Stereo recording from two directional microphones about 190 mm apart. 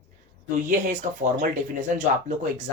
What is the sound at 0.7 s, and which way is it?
Speech, 40° right (ahead or behind).